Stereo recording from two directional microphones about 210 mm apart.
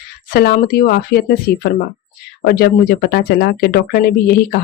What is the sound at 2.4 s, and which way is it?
Speech, 50° left (ahead or behind).